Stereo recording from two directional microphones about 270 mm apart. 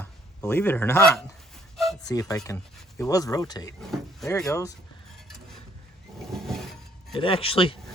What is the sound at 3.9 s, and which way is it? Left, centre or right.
Speech, centre.